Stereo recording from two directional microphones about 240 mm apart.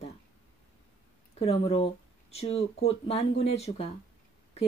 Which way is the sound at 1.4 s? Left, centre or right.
Left.